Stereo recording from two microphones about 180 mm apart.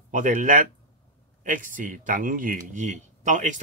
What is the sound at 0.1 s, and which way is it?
Speech, 45° right (ahead or behind).